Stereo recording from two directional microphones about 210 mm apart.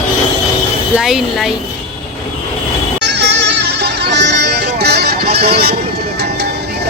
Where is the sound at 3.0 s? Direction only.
55° right (ahead or behind).